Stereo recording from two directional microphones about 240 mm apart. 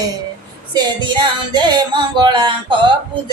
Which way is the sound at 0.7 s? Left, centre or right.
Centre.